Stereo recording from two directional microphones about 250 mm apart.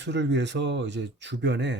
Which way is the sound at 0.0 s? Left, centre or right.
Right.